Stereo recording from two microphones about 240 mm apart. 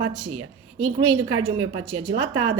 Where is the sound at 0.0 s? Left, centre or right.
Right.